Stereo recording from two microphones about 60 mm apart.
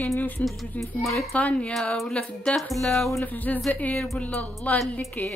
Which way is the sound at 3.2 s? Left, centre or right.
Left.